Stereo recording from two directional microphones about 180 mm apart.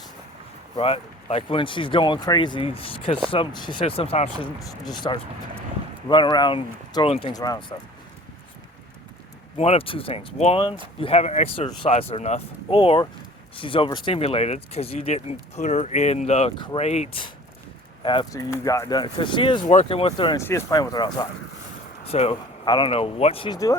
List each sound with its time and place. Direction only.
0.8 s speech: 30° left (ahead or behind)
9.6 s speech: 35° left (ahead or behind)
19.6 s speech: 40° left (ahead or behind)
20.4 s speech: 15° left (ahead or behind)
22.0 s speech: 35° left (ahead or behind)